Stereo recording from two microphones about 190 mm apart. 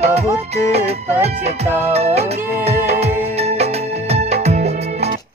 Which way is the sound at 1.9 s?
35° right (ahead or behind).